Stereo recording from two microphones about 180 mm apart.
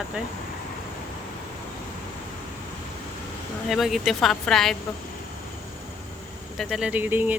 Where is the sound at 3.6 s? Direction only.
Centre (ahead or behind).